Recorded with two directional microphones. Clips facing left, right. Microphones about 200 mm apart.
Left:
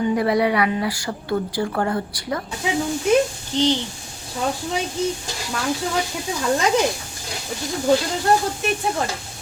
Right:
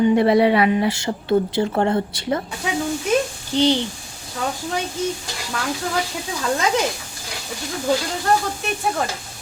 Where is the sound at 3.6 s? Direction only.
15° right (ahead or behind).